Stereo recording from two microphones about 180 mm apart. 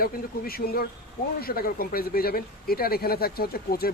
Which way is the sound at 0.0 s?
55° left (ahead or behind).